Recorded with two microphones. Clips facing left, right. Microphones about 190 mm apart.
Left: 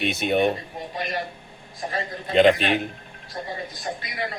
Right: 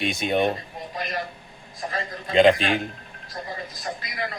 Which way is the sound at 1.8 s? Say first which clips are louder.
Left 1 dB; 25° left (ahead or behind).